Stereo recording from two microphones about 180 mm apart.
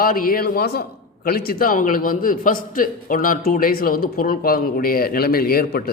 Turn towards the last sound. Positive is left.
turn(degrees=60)  # may be behind; listen again after turning